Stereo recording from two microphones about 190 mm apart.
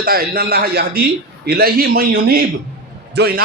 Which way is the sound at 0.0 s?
50° right (ahead or behind).